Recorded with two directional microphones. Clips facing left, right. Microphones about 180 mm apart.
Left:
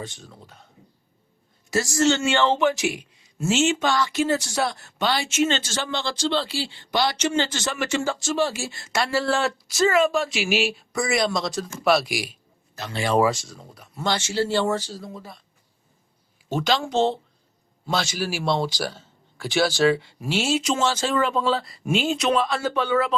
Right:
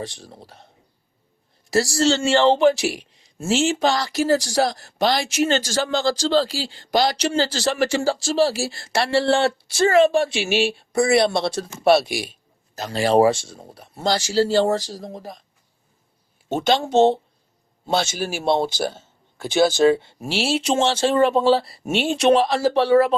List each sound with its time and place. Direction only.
0.0 s speech: 35° right (ahead or behind)
1.7 s speech: 35° right (ahead or behind)
12.7 s speech: 40° right (ahead or behind)
16.6 s speech: 25° right (ahead or behind)